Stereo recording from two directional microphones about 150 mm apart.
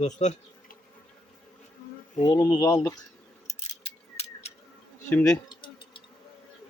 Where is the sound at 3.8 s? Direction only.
45° left (ahead or behind).